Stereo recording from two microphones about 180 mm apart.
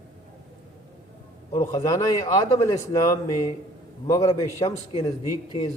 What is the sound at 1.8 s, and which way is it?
A man's voice, 20° left (ahead or behind).